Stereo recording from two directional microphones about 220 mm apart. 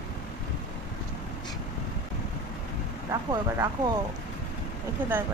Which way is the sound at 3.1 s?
15° right (ahead or behind).